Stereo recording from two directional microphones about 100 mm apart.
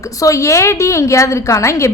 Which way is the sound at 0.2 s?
30° left (ahead or behind).